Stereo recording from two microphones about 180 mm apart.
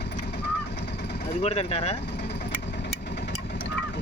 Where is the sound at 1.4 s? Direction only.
35° left (ahead or behind).